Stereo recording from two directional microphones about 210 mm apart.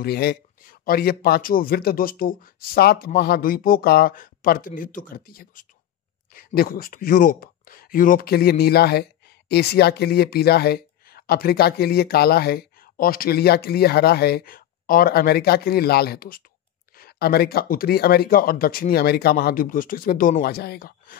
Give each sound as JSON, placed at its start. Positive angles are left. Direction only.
{"t": 0.0, "sound": "speech", "side_deg": 50}